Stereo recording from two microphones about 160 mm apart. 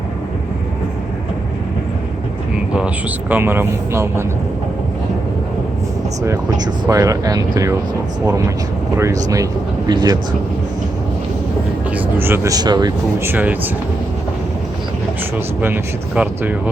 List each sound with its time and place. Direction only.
2.7 s speech: 10° right (ahead or behind)
6.2 s speech: 20° right (ahead or behind)
9.3 s speech: 20° right (ahead or behind)
11.9 s speech: 15° right (ahead or behind)
13.2 s speech: 10° right (ahead or behind)
15.6 s speech: 10° right (ahead or behind)